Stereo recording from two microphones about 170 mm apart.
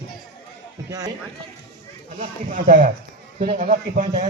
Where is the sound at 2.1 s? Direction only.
45° right (ahead or behind).